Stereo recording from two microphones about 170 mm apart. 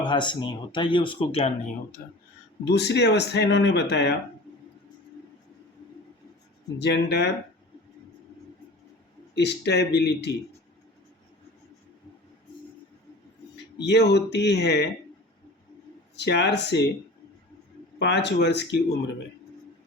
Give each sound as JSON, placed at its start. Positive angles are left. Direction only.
{"t": 0.0, "sound": "speech", "side_deg": 25}
{"t": 2.6, "sound": "speech", "side_deg": 85}
{"t": 6.7, "sound": "speech", "side_deg": 80}
{"t": 9.3, "sound": "speech", "side_deg": 80}
{"t": 13.7, "sound": "speech", "side_deg": 85}
{"t": 16.1, "sound": "speech", "side_deg": 85}
{"t": 18.0, "sound": "speech", "side_deg": 85}